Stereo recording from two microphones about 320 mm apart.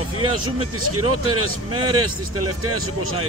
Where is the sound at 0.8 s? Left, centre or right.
Right.